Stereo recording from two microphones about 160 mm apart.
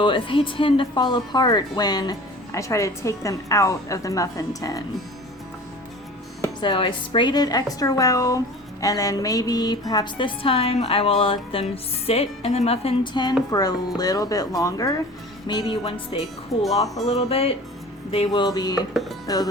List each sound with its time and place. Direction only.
0.0 s speech: 30° left (ahead or behind)
6.4 s a woman's voice: 30° left (ahead or behind)
18.3 s speech: 25° left (ahead or behind)